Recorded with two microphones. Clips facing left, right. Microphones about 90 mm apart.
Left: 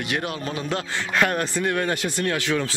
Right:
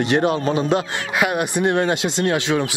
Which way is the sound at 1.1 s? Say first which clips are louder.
Right 2 dB; 10° right (ahead or behind).